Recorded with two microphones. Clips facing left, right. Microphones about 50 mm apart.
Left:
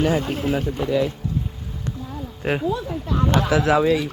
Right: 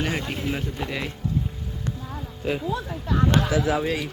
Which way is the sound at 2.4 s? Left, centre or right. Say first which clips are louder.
Left 4 dB; left.